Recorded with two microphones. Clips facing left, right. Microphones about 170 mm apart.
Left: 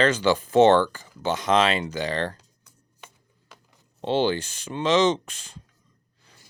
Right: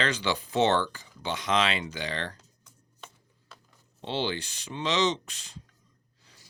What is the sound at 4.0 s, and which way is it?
Speech, 45° left (ahead or behind).